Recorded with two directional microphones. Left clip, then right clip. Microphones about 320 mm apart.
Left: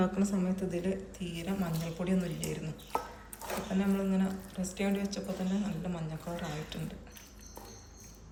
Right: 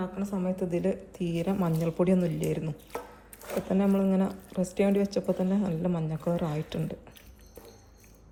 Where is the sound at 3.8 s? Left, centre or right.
Centre.